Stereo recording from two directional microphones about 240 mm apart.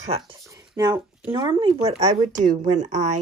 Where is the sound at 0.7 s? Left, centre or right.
Centre.